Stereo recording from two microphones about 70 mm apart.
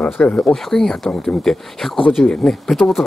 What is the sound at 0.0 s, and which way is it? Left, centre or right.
Speech, left.